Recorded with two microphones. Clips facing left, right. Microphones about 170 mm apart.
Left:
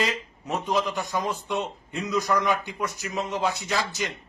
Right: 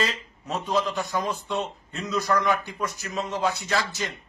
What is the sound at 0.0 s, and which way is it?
A man's voice, 15° left (ahead or behind).